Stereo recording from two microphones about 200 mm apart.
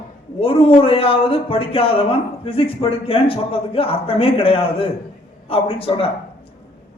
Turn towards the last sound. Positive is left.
turn(degrees=30)  # may be behind; listen again after turning